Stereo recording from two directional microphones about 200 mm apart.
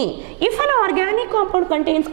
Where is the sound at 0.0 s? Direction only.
10° right (ahead or behind).